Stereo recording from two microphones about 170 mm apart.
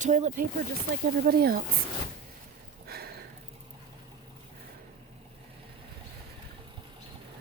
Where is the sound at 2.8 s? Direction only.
65° right (ahead or behind).